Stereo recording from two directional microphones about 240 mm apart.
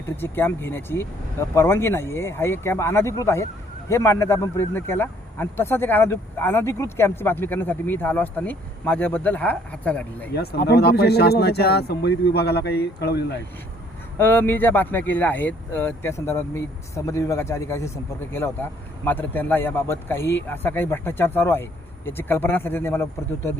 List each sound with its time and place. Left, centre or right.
0.0 s speech: centre
10.6 s a man's voice: left
14.2 s speech: centre